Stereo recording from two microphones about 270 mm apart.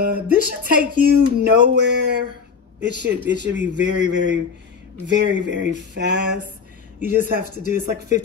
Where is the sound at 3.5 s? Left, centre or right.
Right.